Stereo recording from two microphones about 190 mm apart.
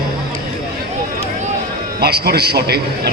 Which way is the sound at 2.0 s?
55° right (ahead or behind).